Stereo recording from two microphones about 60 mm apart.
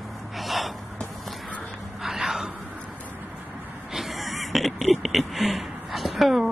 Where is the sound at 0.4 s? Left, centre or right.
Centre.